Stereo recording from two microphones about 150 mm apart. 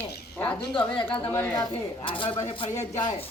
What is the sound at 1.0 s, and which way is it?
Speech, 35° left (ahead or behind).